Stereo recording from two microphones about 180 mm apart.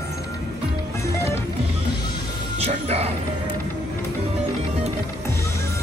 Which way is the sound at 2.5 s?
35° right (ahead or behind).